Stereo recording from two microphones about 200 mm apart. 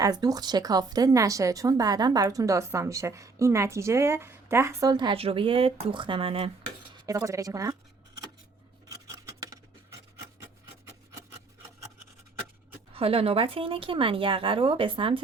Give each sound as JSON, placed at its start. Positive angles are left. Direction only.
{"t": 0.0, "sound": "a woman's voice", "side_deg": -20}
{"t": 7.3, "sound": "a woman's voice", "side_deg": -15}
{"t": 12.9, "sound": "speech", "side_deg": -30}